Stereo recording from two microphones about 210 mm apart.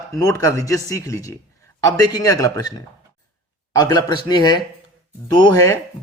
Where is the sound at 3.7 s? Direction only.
20° left (ahead or behind).